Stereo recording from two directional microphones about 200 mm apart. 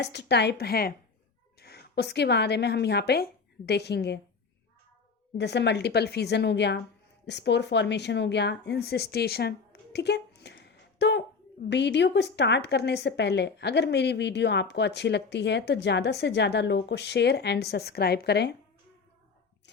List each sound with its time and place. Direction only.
0.0 s a woman's voice: 60° left (ahead or behind)
5.4 s a woman's voice: 60° left (ahead or behind)